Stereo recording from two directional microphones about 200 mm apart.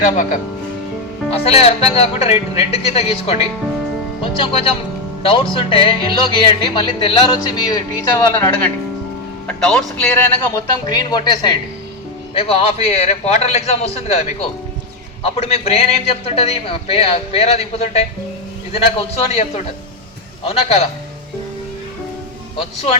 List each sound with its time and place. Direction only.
1.3 s a man's voice: 30° left (ahead or behind); by 10.6 s 5° left (ahead or behind)
10.8 s a man's voice: 20° left (ahead or behind)